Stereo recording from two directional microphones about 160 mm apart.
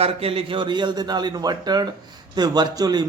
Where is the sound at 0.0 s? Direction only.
35° right (ahead or behind).